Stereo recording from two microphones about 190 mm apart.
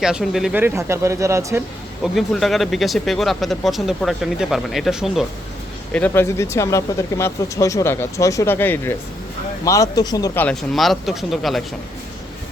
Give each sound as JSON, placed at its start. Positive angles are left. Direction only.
{"t": 0.0, "sound": "speech", "side_deg": -5}
{"t": 2.1, "sound": "speech", "side_deg": 0}
{"t": 5.9, "sound": "speech", "side_deg": 10}
{"t": 10.4, "sound": "speech", "side_deg": 0}